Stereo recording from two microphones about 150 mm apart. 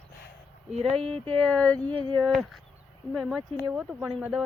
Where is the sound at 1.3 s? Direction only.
5° left (ahead or behind); by 4.3 s 10° right (ahead or behind).